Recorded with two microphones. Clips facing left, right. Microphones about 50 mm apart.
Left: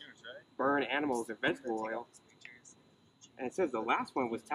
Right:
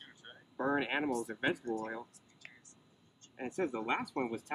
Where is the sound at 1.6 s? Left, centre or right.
Left.